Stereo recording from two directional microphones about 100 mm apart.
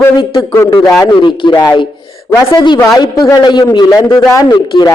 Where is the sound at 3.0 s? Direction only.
40° left (ahead or behind).